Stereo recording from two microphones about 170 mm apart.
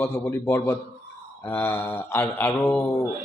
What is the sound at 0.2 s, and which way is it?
A man's voice, 10° left (ahead or behind).